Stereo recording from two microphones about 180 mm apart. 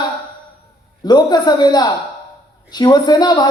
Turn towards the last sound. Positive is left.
turn(degrees=25)  # may be behind; listen again after turning